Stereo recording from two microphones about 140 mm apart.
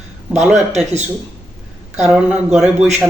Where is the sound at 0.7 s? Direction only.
55° right (ahead or behind).